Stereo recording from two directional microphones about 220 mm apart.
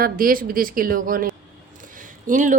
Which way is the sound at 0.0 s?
40° right (ahead or behind).